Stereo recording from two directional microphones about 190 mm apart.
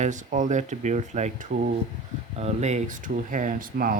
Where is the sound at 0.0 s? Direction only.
40° right (ahead or behind).